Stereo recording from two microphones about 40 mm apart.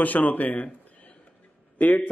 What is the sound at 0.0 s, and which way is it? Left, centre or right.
Speech, left.